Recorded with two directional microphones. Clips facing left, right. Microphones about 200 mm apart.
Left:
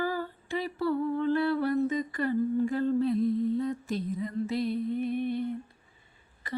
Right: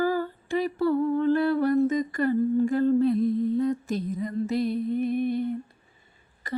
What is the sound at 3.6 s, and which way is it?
Music, 45° right (ahead or behind).